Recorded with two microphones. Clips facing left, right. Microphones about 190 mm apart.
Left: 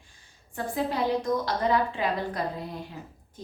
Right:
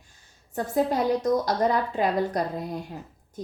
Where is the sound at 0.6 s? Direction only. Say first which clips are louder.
Right 4 dB; 40° right (ahead or behind).